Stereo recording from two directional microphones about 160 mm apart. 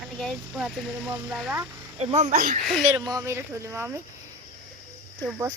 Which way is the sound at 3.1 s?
20° right (ahead or behind).